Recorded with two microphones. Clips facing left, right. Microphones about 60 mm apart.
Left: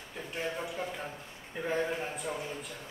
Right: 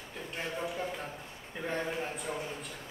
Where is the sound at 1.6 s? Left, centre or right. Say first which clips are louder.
Left 2 dB; centre.